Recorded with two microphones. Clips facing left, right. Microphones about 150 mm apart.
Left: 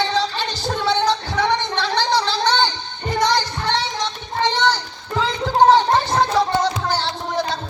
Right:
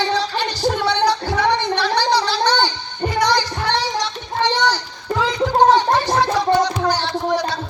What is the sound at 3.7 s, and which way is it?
Music, 20° left (ahead or behind).